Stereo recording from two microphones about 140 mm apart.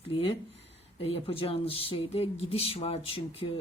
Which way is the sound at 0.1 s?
40° left (ahead or behind).